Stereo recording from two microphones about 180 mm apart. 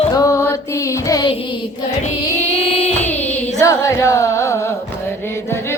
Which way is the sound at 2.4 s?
35° left (ahead or behind).